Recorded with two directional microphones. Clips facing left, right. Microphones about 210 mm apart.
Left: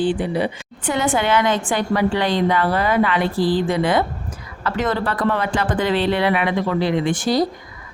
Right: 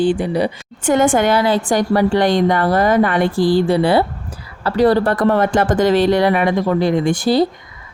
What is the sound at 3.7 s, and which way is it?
Speech, 35° right (ahead or behind).